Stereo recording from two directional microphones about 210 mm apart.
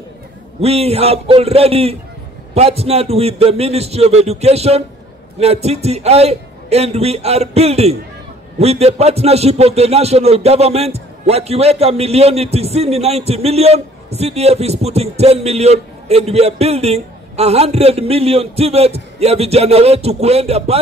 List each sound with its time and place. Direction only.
0.6 s a man's voice: 30° right (ahead or behind)